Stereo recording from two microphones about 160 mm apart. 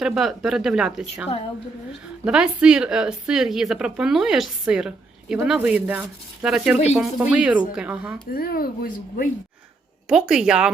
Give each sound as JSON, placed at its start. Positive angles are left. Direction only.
{"t": 0.0, "sound": "speech", "side_deg": 0}
{"t": 2.2, "sound": "speech", "side_deg": -5}
{"t": 8.3, "sound": "speech", "side_deg": 70}
{"t": 10.1, "sound": "speech", "side_deg": -5}